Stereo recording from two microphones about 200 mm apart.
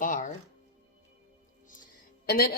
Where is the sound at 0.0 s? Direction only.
40° left (ahead or behind).